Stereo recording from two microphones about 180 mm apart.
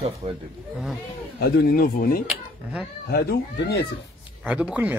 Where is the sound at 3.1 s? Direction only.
60° left (ahead or behind).